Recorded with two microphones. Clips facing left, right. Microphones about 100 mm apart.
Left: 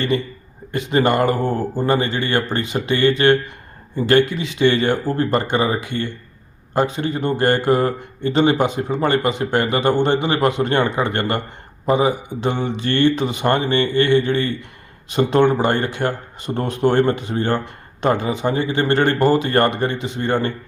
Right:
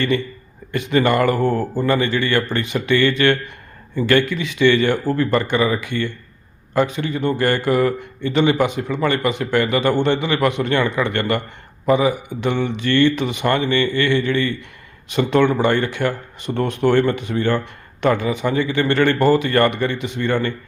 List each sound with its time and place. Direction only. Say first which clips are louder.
0.7 s a man's voice: even; 30° left (ahead or behind)
1.4 s speech: right 2 dB; 15° left (ahead or behind)
1.8 s a man's voice: even; 30° left (ahead or behind)
4.6 s a man's voice: right 1 dB; 40° left (ahead or behind)
9.1 s a man's voice: left 1 dB; 25° left (ahead or behind)
12.9 s a man's voice: right 1 dB; 40° left (ahead or behind)
13.8 s a man's voice: left 2 dB; 25° left (ahead or behind)
15.1 s a man's voice: left 1 dB; 35° left (ahead or behind)